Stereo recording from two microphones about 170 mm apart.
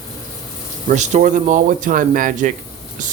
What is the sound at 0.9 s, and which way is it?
Speech, 45° right (ahead or behind).